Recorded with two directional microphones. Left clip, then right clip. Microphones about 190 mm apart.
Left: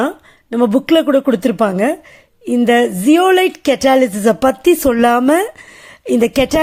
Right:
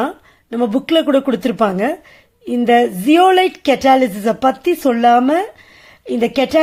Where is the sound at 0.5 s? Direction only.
20° left (ahead or behind).